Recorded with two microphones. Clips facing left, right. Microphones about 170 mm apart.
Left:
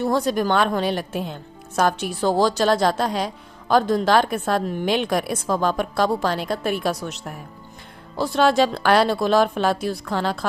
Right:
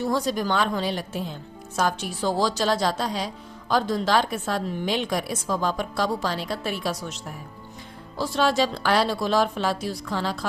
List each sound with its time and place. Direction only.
0.0 s speech: 55° left (ahead or behind)